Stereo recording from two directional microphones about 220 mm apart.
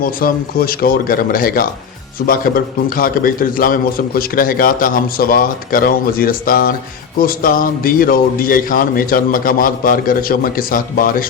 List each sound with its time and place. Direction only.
0.0 s a man's voice: 40° left (ahead or behind)